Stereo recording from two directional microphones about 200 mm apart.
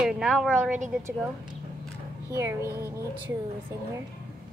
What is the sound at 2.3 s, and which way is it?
Speech, 15° right (ahead or behind).